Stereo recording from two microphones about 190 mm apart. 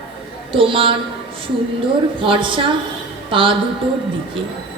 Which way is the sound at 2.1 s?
25° right (ahead or behind).